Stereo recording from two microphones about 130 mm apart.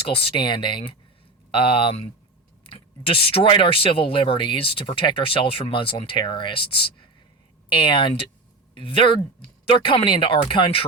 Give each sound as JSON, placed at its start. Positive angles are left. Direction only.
{"t": 0.1, "sound": "speech", "side_deg": 45}